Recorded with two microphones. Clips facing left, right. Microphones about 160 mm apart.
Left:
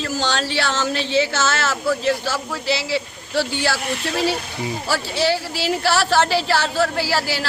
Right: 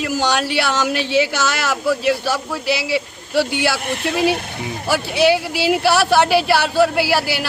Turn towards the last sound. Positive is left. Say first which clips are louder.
# right 4 dB
turn(degrees=-15)  # may be behind; listen again after turning